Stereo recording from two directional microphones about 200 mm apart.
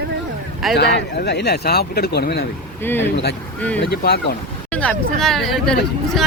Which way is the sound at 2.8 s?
10° left (ahead or behind).